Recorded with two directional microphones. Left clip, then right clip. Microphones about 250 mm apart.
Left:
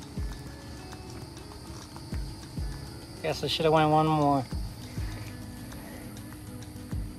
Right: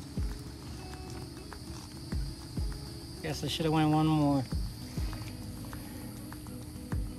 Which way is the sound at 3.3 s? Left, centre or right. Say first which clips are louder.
Left 4 dB; centre.